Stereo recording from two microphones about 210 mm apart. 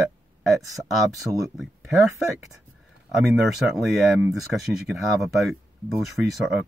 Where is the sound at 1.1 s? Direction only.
15° right (ahead or behind).